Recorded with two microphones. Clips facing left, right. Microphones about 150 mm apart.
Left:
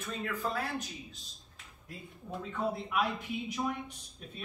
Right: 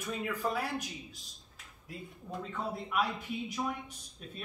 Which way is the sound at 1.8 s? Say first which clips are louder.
Right 1 dB; centre (ahead or behind).